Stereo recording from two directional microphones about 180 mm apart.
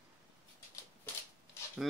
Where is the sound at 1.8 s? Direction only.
Centre (ahead or behind).